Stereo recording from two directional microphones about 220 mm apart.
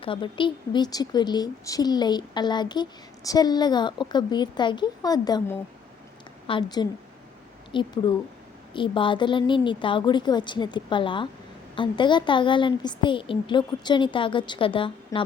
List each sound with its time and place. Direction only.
0.0 s a woman's voice: 25° left (ahead or behind)